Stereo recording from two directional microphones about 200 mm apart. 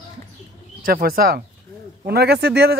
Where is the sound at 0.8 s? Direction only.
45° right (ahead or behind).